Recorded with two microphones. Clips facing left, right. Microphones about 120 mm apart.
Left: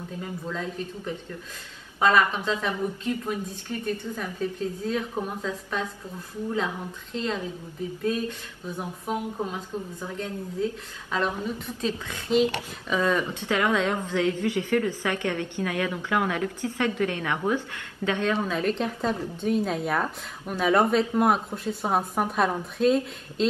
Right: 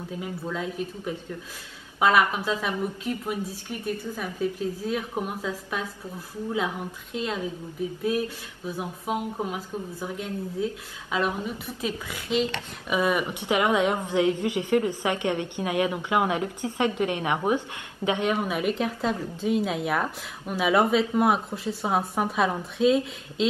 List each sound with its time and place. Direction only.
0.2 s a woman's voice: 10° right (ahead or behind)